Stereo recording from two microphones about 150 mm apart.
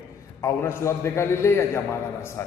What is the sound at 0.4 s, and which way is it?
A man's voice, 20° left (ahead or behind).